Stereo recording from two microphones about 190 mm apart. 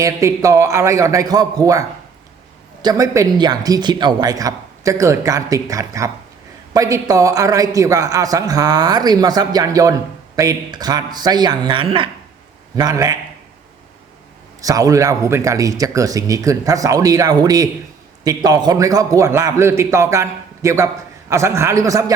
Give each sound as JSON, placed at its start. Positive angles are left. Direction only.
{"t": 0.0, "sound": "a man's voice", "side_deg": -15}
{"t": 2.8, "sound": "a man's voice", "side_deg": -20}
{"t": 14.6, "sound": "a man's voice", "side_deg": -20}